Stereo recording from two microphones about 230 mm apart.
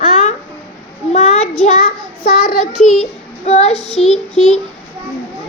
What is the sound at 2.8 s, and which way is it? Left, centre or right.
Speech, left.